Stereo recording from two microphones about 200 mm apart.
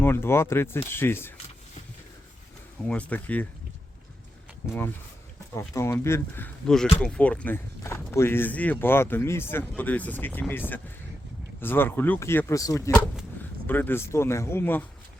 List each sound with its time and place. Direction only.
0.0 s speech: 10° left (ahead or behind)
2.8 s speech: 5° left (ahead or behind)
4.6 s speech: 10° left (ahead or behind)
11.6 s speech: 10° left (ahead or behind)